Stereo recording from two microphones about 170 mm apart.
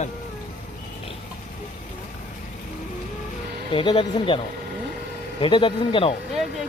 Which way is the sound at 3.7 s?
30° left (ahead or behind).